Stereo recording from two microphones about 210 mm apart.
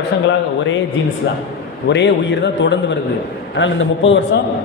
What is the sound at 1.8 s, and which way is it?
A man's voice, 55° left (ahead or behind).